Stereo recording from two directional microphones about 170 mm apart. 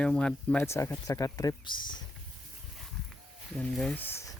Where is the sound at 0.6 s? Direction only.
15° left (ahead or behind).